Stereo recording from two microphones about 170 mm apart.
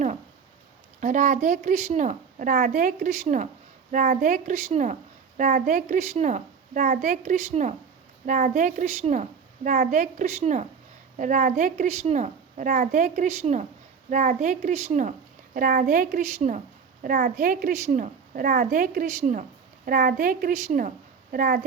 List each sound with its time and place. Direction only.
1.0 s a woman's voice: 45° right (ahead or behind)
9.6 s a woman's voice: 55° right (ahead or behind); by 10.7 s 40° right (ahead or behind)
11.2 s a woman's voice: 50° right (ahead or behind)
14.1 s a woman's voice: 50° right (ahead or behind)
15.5 s a woman's voice: 55° right (ahead or behind)
21.3 s a woman's voice: 60° right (ahead or behind)